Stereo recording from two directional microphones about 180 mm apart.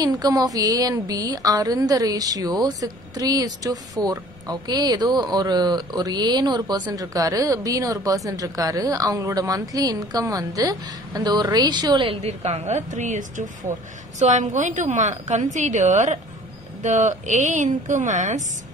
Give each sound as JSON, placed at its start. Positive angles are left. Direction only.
{"t": 0.0, "sound": "a woman's voice", "side_deg": -20}